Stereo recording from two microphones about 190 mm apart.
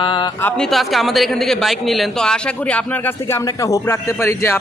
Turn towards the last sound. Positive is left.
turn(degrees=15)  # may be behind; listen again after turning